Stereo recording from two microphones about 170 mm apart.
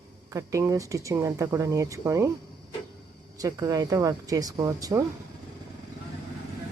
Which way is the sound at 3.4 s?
20° right (ahead or behind).